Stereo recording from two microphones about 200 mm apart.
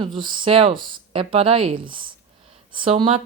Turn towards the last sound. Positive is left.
turn(degrees=-30)  # may be behind; listen again after turning